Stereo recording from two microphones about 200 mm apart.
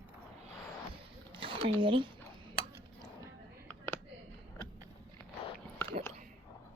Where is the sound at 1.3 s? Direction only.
25° right (ahead or behind).